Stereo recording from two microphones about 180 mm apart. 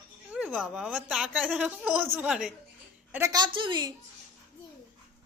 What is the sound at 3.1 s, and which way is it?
Speech, 20° right (ahead or behind).